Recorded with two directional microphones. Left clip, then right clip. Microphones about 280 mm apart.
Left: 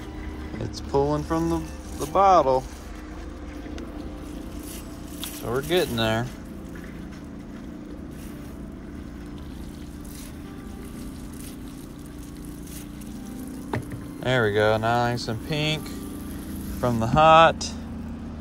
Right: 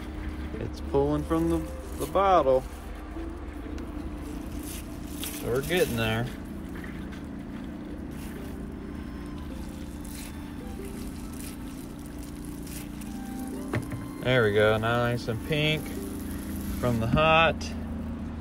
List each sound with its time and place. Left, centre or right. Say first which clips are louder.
0.9 s speech: left 2 dB; centre
5.5 s speech: left 2 dB; centre
14.2 s speech: left 1 dB; centre
16.8 s speech: left 6 dB; centre